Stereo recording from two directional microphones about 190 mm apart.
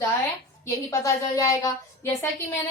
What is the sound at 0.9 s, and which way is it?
A woman's voice, 20° left (ahead or behind).